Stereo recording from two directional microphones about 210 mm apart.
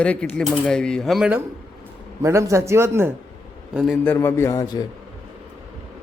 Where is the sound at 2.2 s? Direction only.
15° right (ahead or behind).